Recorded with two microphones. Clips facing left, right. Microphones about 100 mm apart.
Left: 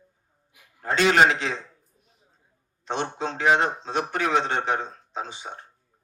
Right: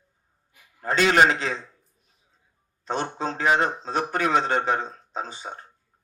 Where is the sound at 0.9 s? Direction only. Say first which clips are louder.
Even; 40° right (ahead or behind).